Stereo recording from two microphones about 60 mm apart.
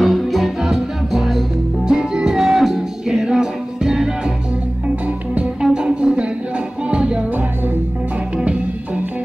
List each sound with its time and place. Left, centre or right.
0.0 s music: centre
4.8 s music: right